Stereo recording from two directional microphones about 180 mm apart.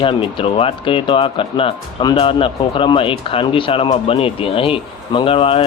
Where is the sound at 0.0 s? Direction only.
30° left (ahead or behind).